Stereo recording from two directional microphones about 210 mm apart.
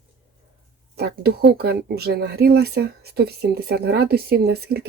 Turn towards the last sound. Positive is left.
turn(degrees=-50)  # may be behind; listen again after turning